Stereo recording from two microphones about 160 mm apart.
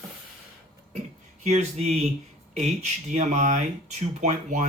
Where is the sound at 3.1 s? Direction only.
45° right (ahead or behind).